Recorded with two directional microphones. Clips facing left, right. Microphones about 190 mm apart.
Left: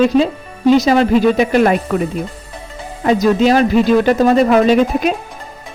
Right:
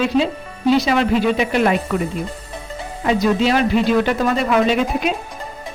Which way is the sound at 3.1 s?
40° left (ahead or behind).